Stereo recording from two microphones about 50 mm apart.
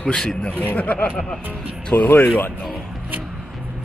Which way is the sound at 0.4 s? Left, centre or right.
Left.